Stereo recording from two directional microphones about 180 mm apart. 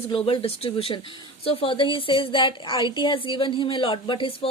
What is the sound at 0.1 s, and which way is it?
A woman's voice, 30° left (ahead or behind).